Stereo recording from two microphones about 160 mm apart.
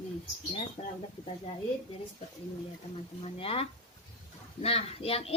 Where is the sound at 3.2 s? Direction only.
35° left (ahead or behind).